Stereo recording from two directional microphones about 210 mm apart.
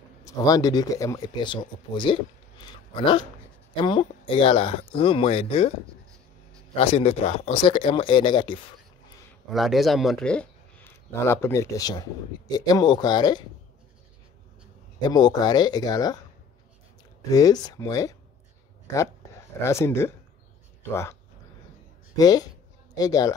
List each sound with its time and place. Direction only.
0.2 s speech: 15° left (ahead or behind)
6.8 s speech: 30° left (ahead or behind)
9.5 s speech: centre (ahead or behind); by 13.4 s 20° left (ahead or behind)
15.0 s speech: 20° left (ahead or behind)
17.3 s speech: 15° left (ahead or behind)
19.6 s speech: 15° left (ahead or behind)